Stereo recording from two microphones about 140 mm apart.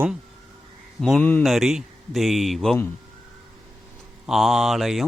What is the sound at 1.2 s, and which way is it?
Speech, 15° left (ahead or behind).